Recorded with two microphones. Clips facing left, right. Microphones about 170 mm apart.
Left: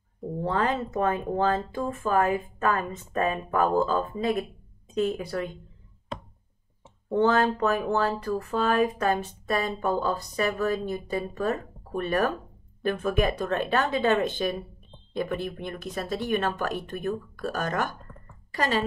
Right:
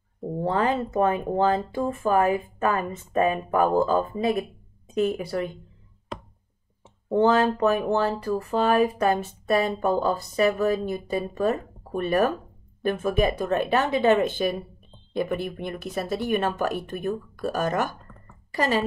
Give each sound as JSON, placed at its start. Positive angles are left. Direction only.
{"t": 0.2, "sound": "a woman's voice", "side_deg": -20}
{"t": 7.1, "sound": "a woman's voice", "side_deg": -20}